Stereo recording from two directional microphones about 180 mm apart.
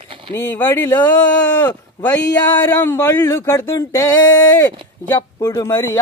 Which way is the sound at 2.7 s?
15° left (ahead or behind).